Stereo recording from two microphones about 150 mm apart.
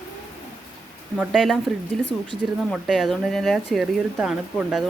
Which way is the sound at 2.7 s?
Centre (ahead or behind).